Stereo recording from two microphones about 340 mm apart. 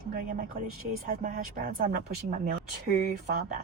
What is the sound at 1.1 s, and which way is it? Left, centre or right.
Speech, right.